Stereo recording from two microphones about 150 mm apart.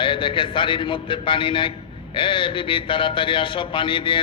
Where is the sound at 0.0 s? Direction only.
35° left (ahead or behind).